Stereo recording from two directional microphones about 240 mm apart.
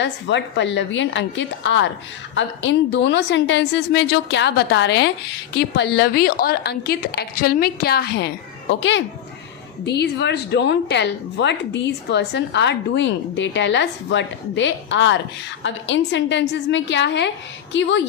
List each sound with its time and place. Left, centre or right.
0.0 s a woman's voice: left